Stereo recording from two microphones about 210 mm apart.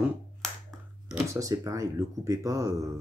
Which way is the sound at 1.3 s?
15° right (ahead or behind).